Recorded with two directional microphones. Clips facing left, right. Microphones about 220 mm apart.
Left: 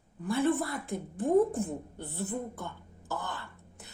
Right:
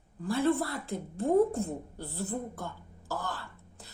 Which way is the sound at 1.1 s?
15° left (ahead or behind).